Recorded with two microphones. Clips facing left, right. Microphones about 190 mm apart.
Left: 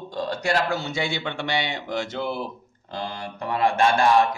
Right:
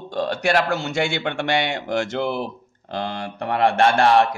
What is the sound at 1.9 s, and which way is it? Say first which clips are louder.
A man's voice: right 5 dB; 75° right (ahead or behind).